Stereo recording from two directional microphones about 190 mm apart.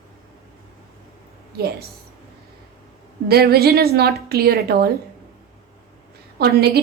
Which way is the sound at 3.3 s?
55° right (ahead or behind).